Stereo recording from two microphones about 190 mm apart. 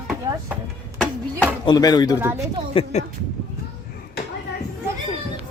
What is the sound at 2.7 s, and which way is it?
Speech, 30° left (ahead or behind).